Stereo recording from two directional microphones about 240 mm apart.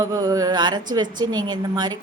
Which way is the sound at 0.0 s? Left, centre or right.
Centre.